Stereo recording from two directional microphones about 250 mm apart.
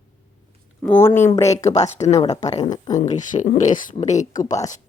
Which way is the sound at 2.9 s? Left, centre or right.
Left.